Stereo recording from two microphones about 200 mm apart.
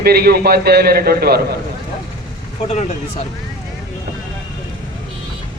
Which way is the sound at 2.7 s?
35° left (ahead or behind).